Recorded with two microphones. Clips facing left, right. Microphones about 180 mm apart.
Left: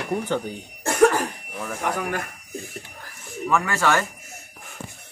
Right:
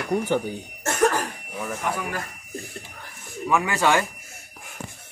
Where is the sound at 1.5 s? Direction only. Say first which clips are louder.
Right 1 dB; centre (ahead or behind).